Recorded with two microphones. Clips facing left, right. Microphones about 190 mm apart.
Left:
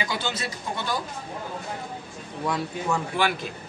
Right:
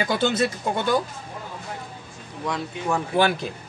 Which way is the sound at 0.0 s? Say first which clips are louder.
Right 8 dB; 55° right (ahead or behind).